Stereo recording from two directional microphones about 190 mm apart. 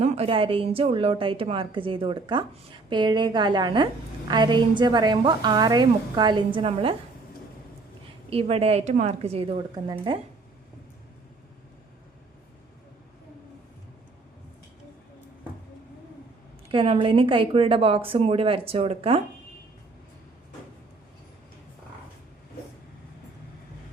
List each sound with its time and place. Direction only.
0.0 s a woman's voice: 35° right (ahead or behind)
8.3 s a woman's voice: 30° right (ahead or behind)
16.7 s a woman's voice: 30° right (ahead or behind)